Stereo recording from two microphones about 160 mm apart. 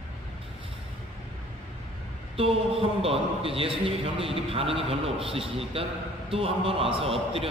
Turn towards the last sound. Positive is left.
turn(degrees=-35)  # may be behind; listen again after turning